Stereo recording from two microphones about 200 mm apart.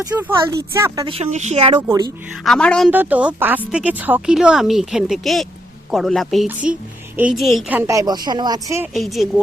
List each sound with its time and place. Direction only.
0.0 s a woman's voice: 10° right (ahead or behind)
1.0 s speech: 30° right (ahead or behind)
1.9 s speech: 20° right (ahead or behind)
2.4 s speech: 5° left (ahead or behind)
2.9 s a woman's voice: 10° right (ahead or behind)
8.9 s speech: centre (ahead or behind)